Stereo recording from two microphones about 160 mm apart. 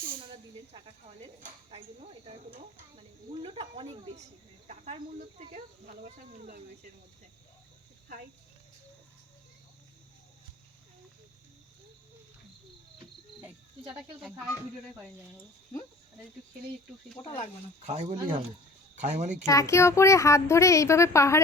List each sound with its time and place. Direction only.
3.4 s speech: 35° right (ahead or behind)
6.0 s speech: 55° right (ahead or behind)
17.2 s speech: 25° left (ahead or behind)
17.8 s speech: 45° right (ahead or behind)
19.5 s a child's voice: 20° left (ahead or behind)